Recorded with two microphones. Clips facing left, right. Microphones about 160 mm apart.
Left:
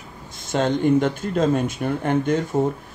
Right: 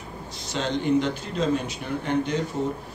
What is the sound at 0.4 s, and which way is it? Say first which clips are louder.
Speech: left 7 dB; 50° left (ahead or behind).